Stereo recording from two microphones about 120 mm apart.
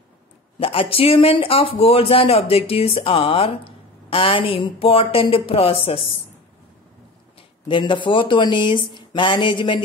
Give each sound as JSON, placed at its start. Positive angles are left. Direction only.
{"t": 0.6, "sound": "a man's voice", "side_deg": 50}
{"t": 7.6, "sound": "speech", "side_deg": 45}